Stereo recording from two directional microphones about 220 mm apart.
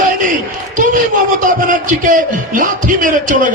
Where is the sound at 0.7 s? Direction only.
35° right (ahead or behind).